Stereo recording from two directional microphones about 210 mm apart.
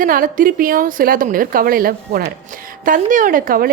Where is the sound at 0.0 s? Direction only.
40° right (ahead or behind).